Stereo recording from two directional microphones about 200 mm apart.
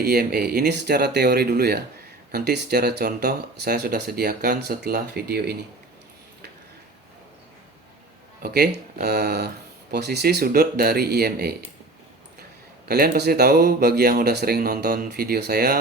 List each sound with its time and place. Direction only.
0.0 s speech: 50° right (ahead or behind)
8.4 s speech: 50° right (ahead or behind)
12.9 s speech: 55° right (ahead or behind)